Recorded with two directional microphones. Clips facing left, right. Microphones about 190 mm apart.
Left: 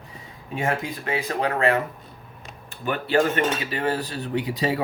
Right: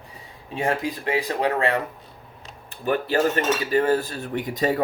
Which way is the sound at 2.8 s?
40° right (ahead or behind).